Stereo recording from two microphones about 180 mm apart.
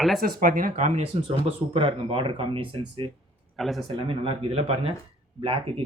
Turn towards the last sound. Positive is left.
turn(degrees=-30)  # may be behind; listen again after turning